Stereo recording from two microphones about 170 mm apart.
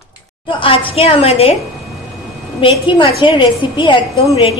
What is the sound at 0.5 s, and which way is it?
A woman's voice, 30° left (ahead or behind).